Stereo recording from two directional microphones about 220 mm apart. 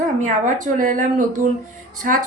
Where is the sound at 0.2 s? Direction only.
35° right (ahead or behind).